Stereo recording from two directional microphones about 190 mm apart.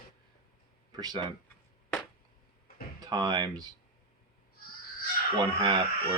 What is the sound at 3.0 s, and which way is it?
Speech, 25° right (ahead or behind).